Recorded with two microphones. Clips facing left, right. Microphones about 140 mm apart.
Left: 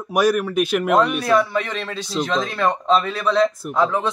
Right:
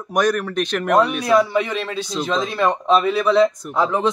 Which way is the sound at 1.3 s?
10° right (ahead or behind).